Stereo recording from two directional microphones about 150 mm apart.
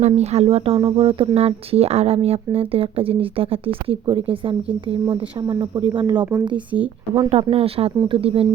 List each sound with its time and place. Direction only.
0.0 s speech: 45° right (ahead or behind)